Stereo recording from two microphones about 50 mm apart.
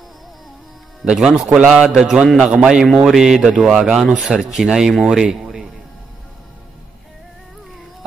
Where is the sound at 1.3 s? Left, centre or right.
Centre.